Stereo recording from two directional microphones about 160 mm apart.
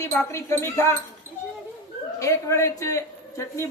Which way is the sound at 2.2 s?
20° left (ahead or behind).